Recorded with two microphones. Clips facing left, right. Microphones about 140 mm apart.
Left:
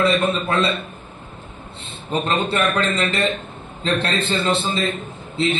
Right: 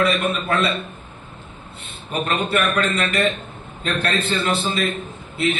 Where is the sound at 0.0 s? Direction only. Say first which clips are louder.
Left 2 dB; 25° left (ahead or behind).